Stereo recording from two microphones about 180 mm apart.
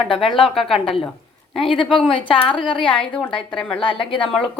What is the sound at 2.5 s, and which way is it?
A woman's voice, 5° left (ahead or behind).